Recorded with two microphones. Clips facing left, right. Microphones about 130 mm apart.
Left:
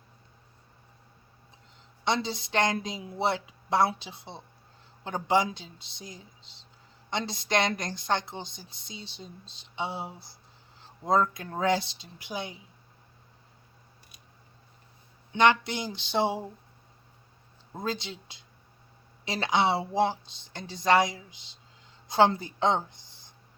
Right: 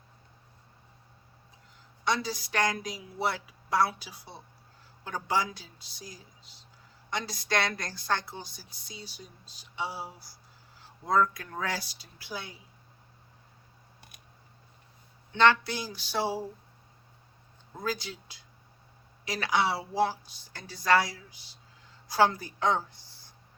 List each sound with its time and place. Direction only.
2.0 s a woman's voice: 25° left (ahead or behind)
15.3 s a woman's voice: 15° left (ahead or behind)
17.7 s a woman's voice: 25° left (ahead or behind)